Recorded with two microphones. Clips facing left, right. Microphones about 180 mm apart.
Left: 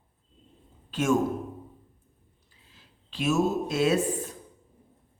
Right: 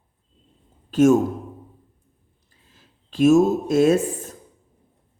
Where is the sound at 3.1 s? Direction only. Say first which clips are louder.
Right 10 dB; 45° right (ahead or behind).